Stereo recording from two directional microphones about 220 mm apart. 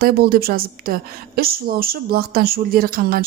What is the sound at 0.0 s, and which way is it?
A woman's voice, 45° right (ahead or behind).